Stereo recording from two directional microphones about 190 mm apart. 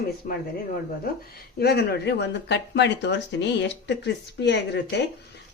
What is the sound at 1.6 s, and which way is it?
Speech, 55° left (ahead or behind).